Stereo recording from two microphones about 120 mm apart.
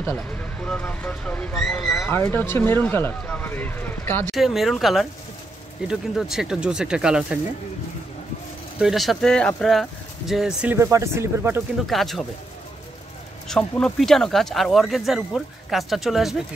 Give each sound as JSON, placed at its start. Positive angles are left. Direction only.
{"t": 0.0, "sound": "speech", "side_deg": 15}
{"t": 2.0, "sound": "speech", "side_deg": 20}
{"t": 4.4, "sound": "speech", "side_deg": 0}
{"t": 8.7, "sound": "speech", "side_deg": 0}
{"t": 10.7, "sound": "speech", "side_deg": -25}
{"t": 11.8, "sound": "speech", "side_deg": 0}
{"t": 13.5, "sound": "speech", "side_deg": 5}